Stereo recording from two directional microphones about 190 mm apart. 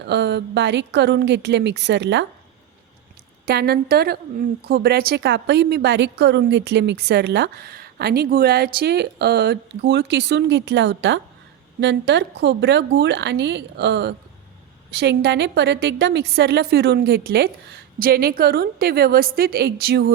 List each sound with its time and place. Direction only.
0.0 s a woman's voice: 65° right (ahead or behind)
3.4 s a woman's voice: 55° right (ahead or behind)